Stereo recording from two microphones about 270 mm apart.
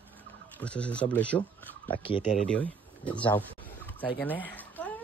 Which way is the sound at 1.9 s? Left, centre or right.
Centre.